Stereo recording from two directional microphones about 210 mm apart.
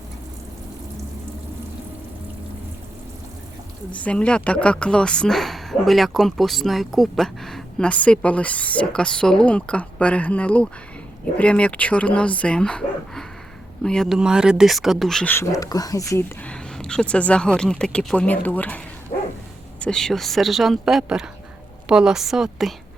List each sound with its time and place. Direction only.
3.9 s speech: 5° left (ahead or behind)
12.4 s bow-wow: 5° left (ahead or behind)
13.8 s speech: 5° left (ahead or behind)
19.1 s dog: 30° left (ahead or behind)
19.8 s speech: 5° left (ahead or behind)